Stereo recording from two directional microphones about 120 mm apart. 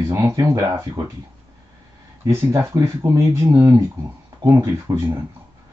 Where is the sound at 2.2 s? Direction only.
25° right (ahead or behind).